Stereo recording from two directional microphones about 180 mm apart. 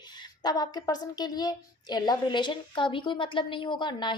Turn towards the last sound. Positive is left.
turn(degrees=25)  # may be behind; listen again after turning